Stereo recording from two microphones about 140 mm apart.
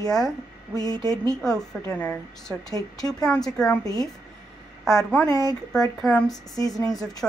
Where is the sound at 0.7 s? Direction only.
25° left (ahead or behind).